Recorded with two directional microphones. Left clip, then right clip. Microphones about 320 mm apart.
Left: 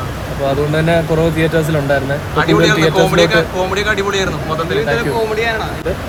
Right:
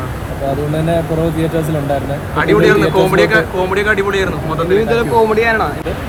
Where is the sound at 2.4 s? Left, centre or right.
Centre.